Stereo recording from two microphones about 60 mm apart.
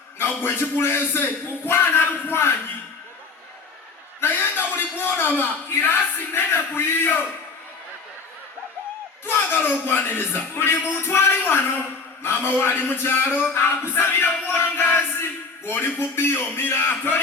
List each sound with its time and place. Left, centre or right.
0.2 s speech: left
4.2 s a sound: left
5.8 s speech: left
9.2 s a man's voice: left
14.4 s music: left